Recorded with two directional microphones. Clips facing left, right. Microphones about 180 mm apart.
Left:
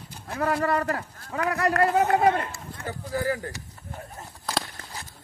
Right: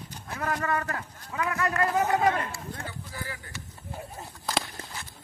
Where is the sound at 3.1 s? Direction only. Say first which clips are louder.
Left 12 dB; 45° left (ahead or behind).